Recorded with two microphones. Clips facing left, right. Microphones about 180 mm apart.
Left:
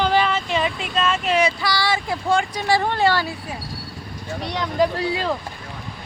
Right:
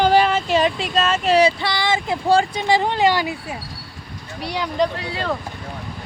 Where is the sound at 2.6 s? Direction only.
20° right (ahead or behind).